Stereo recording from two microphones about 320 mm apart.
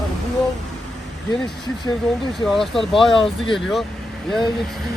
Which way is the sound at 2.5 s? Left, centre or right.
Centre.